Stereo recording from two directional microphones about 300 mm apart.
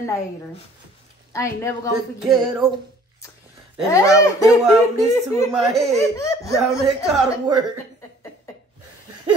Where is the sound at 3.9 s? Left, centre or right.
Centre.